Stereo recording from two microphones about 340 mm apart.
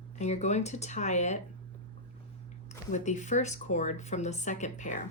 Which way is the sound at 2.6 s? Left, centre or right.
Left.